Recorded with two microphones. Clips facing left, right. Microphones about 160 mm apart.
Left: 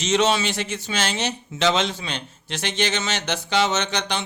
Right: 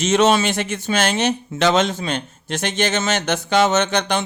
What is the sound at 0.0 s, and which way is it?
Speech, 50° right (ahead or behind).